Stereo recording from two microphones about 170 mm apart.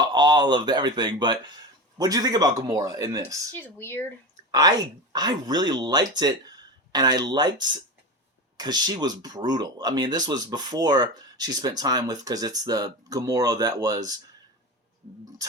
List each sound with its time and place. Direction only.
0.0 s speech: 25° right (ahead or behind)
3.6 s speech: 15° left (ahead or behind)
4.5 s speech: 20° right (ahead or behind)
15.4 s speech: 20° right (ahead or behind)